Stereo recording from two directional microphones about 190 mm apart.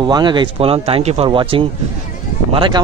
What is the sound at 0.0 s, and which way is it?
Speech, 25° right (ahead or behind).